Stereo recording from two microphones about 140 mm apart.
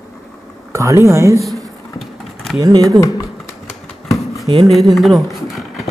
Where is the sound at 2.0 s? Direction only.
Centre (ahead or behind).